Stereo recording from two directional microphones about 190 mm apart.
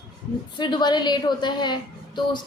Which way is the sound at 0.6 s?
25° left (ahead or behind).